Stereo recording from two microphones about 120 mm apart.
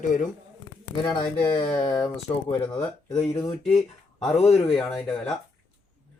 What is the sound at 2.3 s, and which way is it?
Mantra, 40° left (ahead or behind).